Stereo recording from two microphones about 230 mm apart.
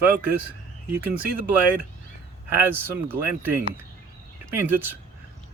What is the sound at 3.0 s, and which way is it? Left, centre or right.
Speech, centre.